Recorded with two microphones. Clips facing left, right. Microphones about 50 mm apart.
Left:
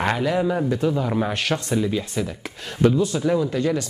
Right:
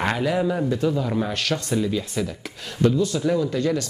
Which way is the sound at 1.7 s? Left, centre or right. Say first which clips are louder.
Left 1 dB; centre.